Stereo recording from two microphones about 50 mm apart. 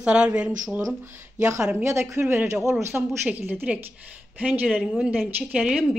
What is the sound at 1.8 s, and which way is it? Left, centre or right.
Speech, right.